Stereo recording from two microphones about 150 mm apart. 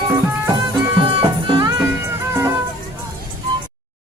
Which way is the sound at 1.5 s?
35° right (ahead or behind).